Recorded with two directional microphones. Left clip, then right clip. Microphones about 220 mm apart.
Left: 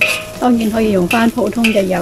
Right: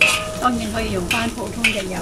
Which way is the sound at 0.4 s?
25° left (ahead or behind).